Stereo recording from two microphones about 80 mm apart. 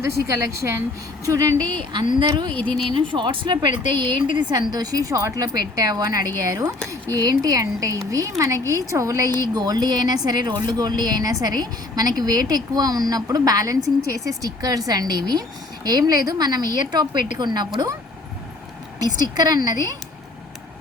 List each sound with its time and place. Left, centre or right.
0.0 s speech: right
1.9 s a woman's voice: right
4.7 s a woman's voice: right
18.9 s a woman's voice: right